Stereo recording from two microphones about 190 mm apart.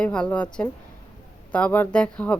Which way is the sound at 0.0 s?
5° left (ahead or behind).